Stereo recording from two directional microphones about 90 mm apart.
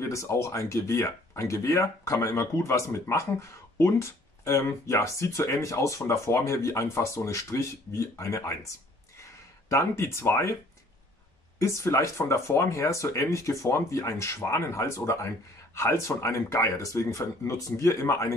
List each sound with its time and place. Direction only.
0.0 s speech: 35° left (ahead or behind)
11.6 s speech: 30° left (ahead or behind)